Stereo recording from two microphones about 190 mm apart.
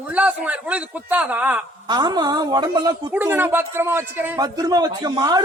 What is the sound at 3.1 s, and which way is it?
A man's voice, 10° right (ahead or behind).